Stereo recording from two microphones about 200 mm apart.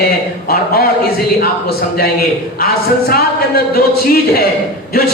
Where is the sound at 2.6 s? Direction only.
50° left (ahead or behind).